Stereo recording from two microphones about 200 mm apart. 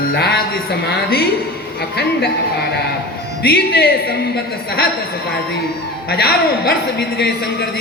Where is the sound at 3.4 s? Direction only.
50° left (ahead or behind).